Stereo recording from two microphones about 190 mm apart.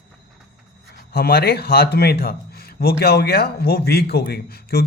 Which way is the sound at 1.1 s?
55° left (ahead or behind).